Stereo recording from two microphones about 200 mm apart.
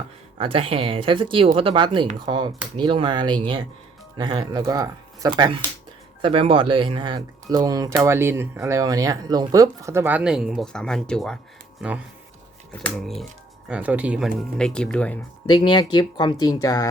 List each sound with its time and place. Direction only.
0.3 s speech: 25° right (ahead or behind); by 15.2 s 5° left (ahead or behind)
15.4 s speech: 25° left (ahead or behind)